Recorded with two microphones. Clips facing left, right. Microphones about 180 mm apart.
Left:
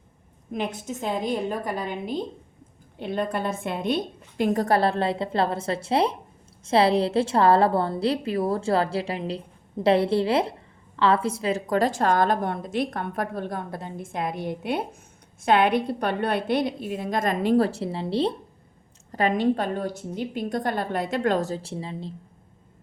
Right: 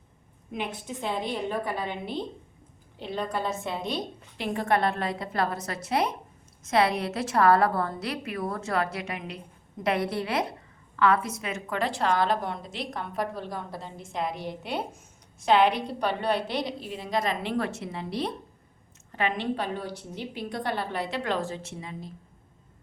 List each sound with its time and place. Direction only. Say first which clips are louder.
0.5 s a woman's voice: left 4 dB; 45° left (ahead or behind)
3.0 s a woman's voice: left 4 dB; 55° left (ahead or behind); by 18.3 s 30° left (ahead or behind)
19.1 s a woman's voice: left 6 dB; 40° left (ahead or behind)